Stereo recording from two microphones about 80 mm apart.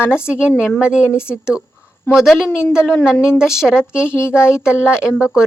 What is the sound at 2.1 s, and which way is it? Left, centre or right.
Speech, centre.